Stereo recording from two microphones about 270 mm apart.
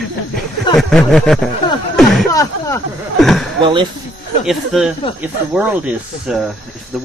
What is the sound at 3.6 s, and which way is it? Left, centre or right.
Speech, centre.